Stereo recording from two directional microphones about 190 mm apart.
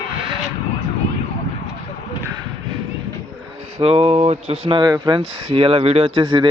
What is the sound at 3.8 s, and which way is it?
Speech, 30° right (ahead or behind).